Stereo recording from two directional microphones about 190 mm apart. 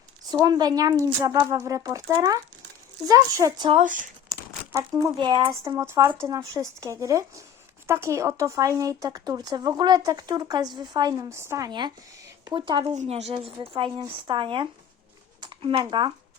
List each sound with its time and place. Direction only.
0.3 s speech: 20° right (ahead or behind)
3.7 s speech: 40° right (ahead or behind)
4.7 s speech: 15° right (ahead or behind)
13.0 s speech: 35° right (ahead or behind)